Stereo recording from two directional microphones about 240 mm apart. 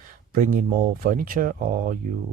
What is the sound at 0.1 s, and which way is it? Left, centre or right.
Speech, right.